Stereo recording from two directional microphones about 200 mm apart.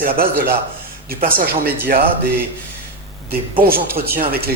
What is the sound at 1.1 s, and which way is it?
Speech, 45° right (ahead or behind).